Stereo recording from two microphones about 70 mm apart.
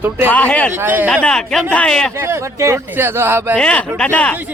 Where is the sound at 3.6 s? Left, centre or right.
Centre.